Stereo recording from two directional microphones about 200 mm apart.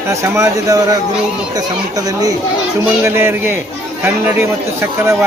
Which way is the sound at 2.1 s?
20° right (ahead or behind).